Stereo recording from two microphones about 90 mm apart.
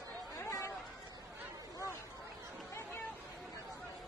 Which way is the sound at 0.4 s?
35° left (ahead or behind).